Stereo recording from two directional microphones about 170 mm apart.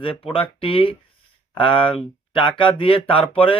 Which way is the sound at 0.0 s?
30° left (ahead or behind).